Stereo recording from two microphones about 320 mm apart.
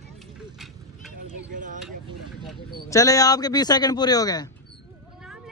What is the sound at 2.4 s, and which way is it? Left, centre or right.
Speech, centre.